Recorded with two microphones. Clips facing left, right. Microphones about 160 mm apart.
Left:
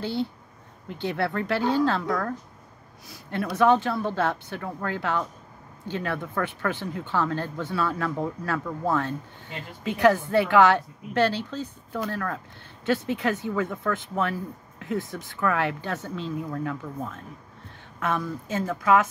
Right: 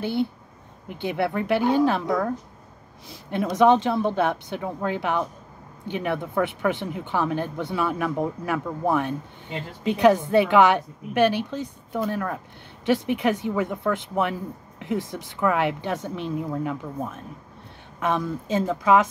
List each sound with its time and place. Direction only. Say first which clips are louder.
0.0 s a woman's voice: right 3 dB; 15° right (ahead or behind)